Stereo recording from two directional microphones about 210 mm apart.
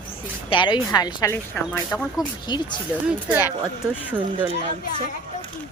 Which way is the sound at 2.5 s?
20° left (ahead or behind).